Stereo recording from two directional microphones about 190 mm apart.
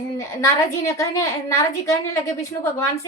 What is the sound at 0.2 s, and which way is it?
A woman's voice, 15° left (ahead or behind).